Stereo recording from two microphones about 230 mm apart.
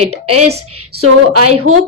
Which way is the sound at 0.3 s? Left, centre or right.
Right.